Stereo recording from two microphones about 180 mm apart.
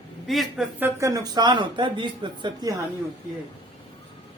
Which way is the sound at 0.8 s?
15° right (ahead or behind).